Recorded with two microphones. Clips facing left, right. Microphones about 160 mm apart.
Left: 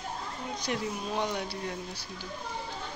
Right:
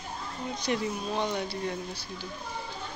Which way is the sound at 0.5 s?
10° left (ahead or behind).